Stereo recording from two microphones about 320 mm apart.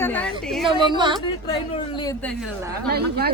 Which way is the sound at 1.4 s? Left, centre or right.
Centre.